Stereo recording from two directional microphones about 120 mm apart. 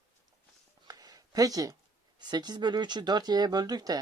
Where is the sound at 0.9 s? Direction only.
30° right (ahead or behind).